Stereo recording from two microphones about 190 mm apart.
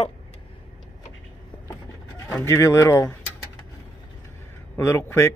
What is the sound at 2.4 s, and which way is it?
Speech, 15° left (ahead or behind).